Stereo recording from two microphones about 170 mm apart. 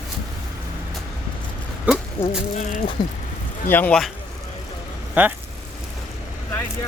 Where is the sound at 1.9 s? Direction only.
10° right (ahead or behind).